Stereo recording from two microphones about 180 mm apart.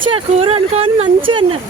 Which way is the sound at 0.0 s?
30° right (ahead or behind).